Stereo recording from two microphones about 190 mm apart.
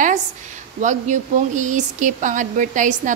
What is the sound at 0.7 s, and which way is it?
Speech, 40° right (ahead or behind).